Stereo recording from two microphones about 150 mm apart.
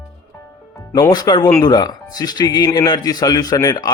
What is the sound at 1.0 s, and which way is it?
Speech, 25° left (ahead or behind).